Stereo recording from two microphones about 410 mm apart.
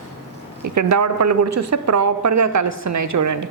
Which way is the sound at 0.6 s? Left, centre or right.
Right.